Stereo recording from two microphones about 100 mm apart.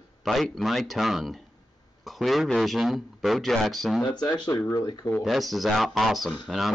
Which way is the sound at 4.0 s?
45° left (ahead or behind).